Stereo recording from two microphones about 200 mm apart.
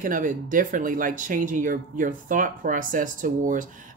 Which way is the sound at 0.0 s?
40° right (ahead or behind).